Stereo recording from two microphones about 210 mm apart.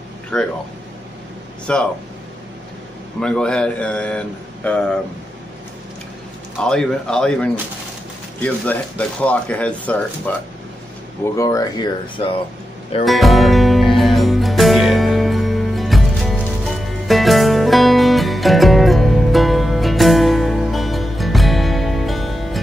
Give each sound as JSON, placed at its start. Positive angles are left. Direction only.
{"t": 0.3, "sound": "a man's voice", "side_deg": 5}
{"t": 1.7, "sound": "a man's voice", "side_deg": 5}
{"t": 3.2, "sound": "a man's voice", "side_deg": 5}
{"t": 6.6, "sound": "a man's voice", "side_deg": 0}
{"t": 11.3, "sound": "speech", "side_deg": 15}
{"t": 13.0, "sound": "music", "side_deg": 0}